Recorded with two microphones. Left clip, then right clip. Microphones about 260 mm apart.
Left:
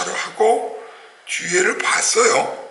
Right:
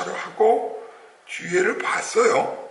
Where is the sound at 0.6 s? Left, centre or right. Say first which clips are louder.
Left 2 dB; right.